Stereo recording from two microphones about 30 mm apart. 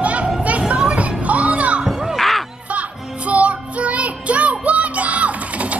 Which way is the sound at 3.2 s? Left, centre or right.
Right.